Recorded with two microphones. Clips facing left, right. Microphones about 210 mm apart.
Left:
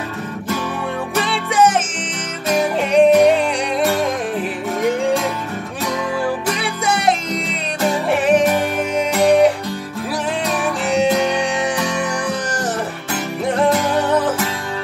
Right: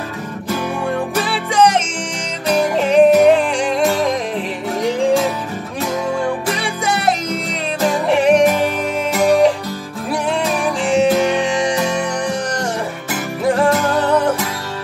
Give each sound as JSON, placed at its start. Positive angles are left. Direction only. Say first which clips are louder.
{"t": 1.1, "sound": "music", "louder": "right 1 dB", "side_deg": 0}
{"t": 6.4, "sound": "music", "louder": "even", "side_deg": 0}
{"t": 10.6, "sound": "music", "louder": "right 2 dB", "side_deg": 0}
{"t": 13.1, "sound": "music", "louder": "right 3 dB", "side_deg": 0}